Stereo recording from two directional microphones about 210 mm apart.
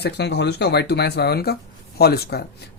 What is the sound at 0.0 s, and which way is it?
Speech, 55° left (ahead or behind).